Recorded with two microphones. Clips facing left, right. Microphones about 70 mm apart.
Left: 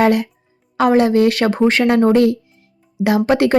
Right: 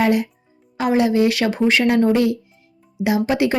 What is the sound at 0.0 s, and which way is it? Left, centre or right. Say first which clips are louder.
Speech: left 3 dB; left.